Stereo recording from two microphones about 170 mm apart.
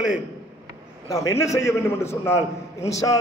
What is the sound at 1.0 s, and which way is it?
A man's voice, 20° left (ahead or behind).